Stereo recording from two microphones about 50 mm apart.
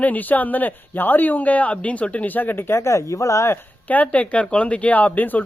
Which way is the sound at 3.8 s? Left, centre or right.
Left.